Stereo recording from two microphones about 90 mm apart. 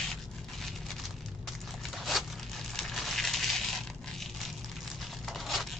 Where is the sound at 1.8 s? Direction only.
Centre (ahead or behind).